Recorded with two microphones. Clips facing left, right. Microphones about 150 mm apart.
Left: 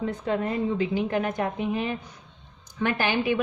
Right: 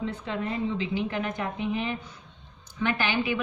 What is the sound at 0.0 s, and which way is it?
Speech, 45° left (ahead or behind).